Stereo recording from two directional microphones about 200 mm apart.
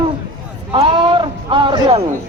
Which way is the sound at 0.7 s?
25° right (ahead or behind).